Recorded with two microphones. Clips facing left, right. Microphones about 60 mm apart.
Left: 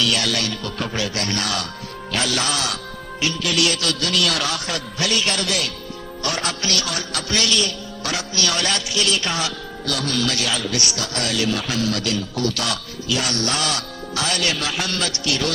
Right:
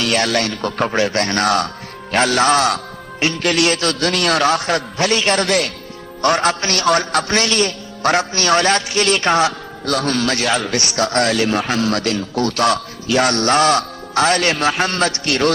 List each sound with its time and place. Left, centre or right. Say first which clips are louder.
0.0 s a man's voice: right 5 dB; right